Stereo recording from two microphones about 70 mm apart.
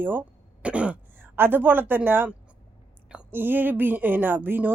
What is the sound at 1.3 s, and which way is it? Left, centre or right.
Speech, right.